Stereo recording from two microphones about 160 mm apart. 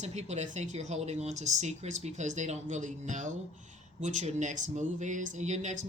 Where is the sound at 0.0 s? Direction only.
45° right (ahead or behind).